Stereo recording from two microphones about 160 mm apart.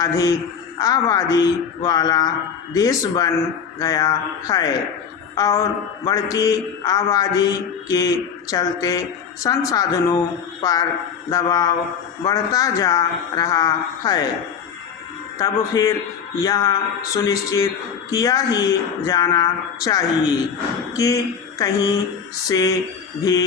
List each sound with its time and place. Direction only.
0.0 s a man's voice: 20° left (ahead or behind)
15.4 s a man's voice: 20° left (ahead or behind)